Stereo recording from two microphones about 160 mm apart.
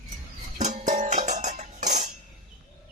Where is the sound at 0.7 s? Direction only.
50° right (ahead or behind).